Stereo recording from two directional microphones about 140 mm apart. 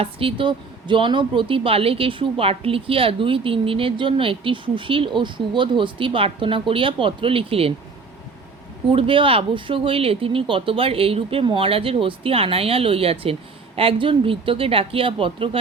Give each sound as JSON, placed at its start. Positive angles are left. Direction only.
{"t": 0.0, "sound": "speech", "side_deg": -40}
{"t": 8.9, "sound": "speech", "side_deg": -40}